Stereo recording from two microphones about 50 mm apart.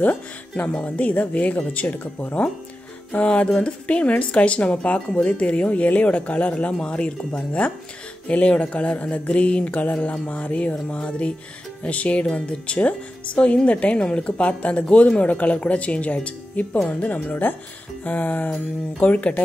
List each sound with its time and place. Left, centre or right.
0.0 s speech: left
3.3 s speech: left
9.7 s speech: left